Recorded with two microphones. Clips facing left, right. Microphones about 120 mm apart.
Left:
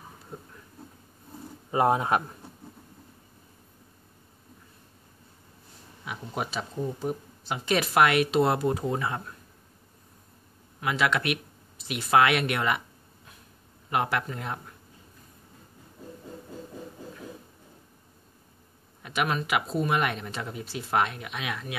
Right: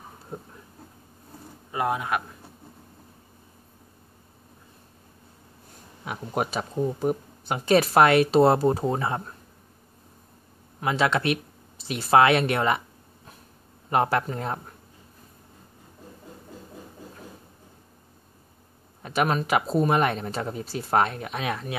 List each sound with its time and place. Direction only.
1.7 s speech: 30° left (ahead or behind)
6.0 s speech: 50° right (ahead or behind); by 9.3 s 30° right (ahead or behind)
10.8 s speech: 30° right (ahead or behind)
13.8 s speech: 35° right (ahead or behind)
19.0 s speech: 35° right (ahead or behind)